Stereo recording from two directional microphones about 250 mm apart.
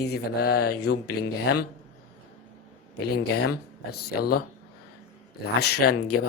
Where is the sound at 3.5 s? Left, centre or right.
Left.